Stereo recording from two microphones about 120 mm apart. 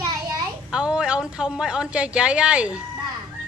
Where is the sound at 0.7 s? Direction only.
5° right (ahead or behind).